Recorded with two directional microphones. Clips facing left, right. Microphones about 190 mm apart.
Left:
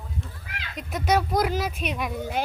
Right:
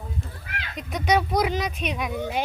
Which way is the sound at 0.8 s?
Centre (ahead or behind).